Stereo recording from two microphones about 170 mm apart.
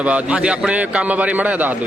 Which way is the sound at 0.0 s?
5° right (ahead or behind).